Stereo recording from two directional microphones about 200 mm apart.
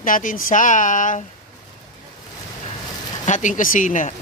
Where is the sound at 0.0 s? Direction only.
40° left (ahead or behind).